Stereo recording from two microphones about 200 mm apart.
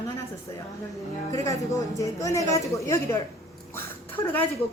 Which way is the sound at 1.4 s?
15° left (ahead or behind).